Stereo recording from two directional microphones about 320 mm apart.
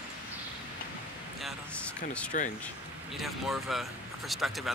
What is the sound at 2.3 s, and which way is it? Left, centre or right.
Speech, left.